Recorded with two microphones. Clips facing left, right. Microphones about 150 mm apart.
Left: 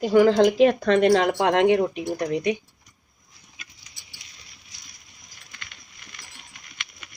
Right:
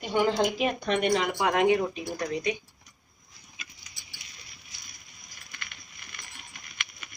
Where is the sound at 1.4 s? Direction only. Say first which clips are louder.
Left 5 dB; 80° left.